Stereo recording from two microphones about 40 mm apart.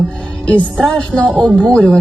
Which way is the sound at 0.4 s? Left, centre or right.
Left.